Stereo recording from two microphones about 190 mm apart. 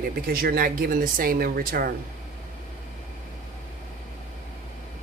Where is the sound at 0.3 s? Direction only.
50° right (ahead or behind).